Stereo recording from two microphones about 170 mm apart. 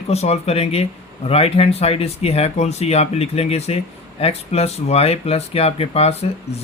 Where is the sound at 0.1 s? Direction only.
40° left (ahead or behind).